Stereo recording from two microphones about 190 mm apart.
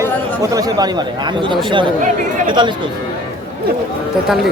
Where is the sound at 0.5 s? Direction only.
20° right (ahead or behind).